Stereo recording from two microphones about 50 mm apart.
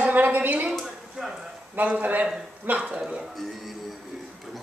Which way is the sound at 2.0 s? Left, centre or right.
Right.